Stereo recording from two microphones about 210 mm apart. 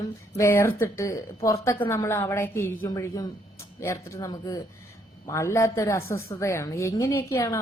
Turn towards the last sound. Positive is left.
turn(degrees=15)  # may be behind; listen again after turning